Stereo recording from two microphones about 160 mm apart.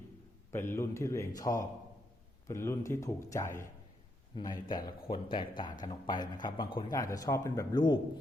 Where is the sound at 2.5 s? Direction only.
15° left (ahead or behind).